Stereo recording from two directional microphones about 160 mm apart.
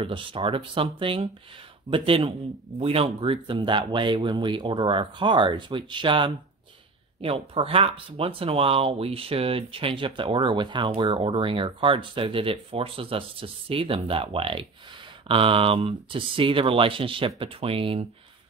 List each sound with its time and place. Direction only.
0.0 s speech: 35° right (ahead or behind)